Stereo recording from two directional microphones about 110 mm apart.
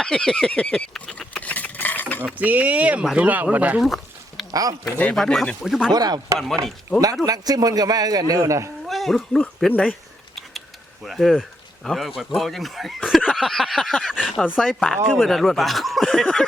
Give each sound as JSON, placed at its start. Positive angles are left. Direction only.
{"t": 0.0, "sound": "a sound", "side_deg": 5}
{"t": 2.4, "sound": "speech", "side_deg": -15}
{"t": 3.8, "sound": "a sound", "side_deg": 0}
{"t": 5.1, "sound": "speech", "side_deg": 0}
{"t": 5.9, "sound": "a man's voice", "side_deg": -35}
{"t": 8.9, "sound": "speech", "side_deg": 0}
{"t": 9.6, "sound": "speech", "side_deg": 10}
{"t": 11.0, "sound": "speech", "side_deg": 0}